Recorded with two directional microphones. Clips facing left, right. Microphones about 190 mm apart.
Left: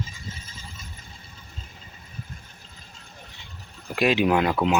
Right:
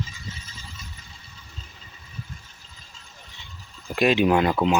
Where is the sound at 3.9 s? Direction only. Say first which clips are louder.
Right 2 dB; 5° left (ahead or behind).